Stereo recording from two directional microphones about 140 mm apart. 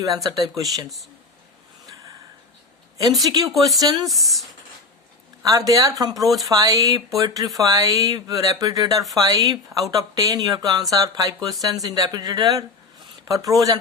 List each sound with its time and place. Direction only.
0.0 s speech: 25° right (ahead or behind)
3.2 s speech: 25° right (ahead or behind)
4.1 s speech: centre (ahead or behind)
5.4 s speech: 25° right (ahead or behind)